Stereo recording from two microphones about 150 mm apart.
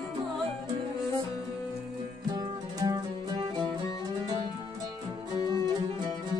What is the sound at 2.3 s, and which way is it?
Music, 25° right (ahead or behind).